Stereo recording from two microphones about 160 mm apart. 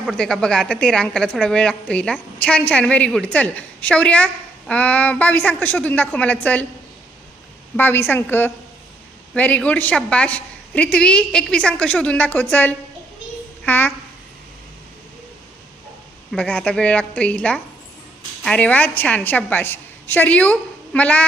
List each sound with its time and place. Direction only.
0.1 s a woman's voice: 5° left (ahead or behind)
7.8 s a woman's voice: 10° left (ahead or behind)
16.3 s a woman's voice: 10° left (ahead or behind)